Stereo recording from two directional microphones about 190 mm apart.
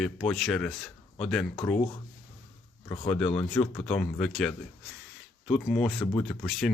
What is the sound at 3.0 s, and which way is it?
Speech, 5° left (ahead or behind).